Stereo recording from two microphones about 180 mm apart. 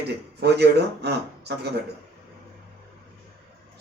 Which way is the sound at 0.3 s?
65° right (ahead or behind).